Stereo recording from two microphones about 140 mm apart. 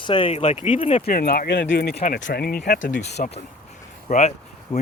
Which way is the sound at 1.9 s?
80° left.